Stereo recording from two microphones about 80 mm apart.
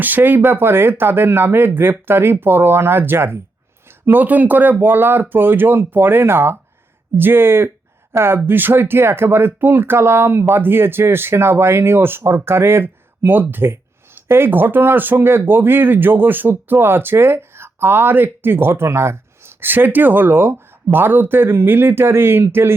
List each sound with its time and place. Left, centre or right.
0.0 s speech: right